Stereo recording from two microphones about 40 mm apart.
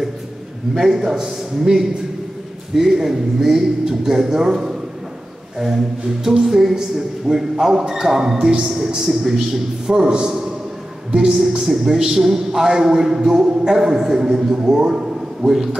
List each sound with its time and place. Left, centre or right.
0.7 s a woman's voice: centre
15.4 s a woman's voice: centre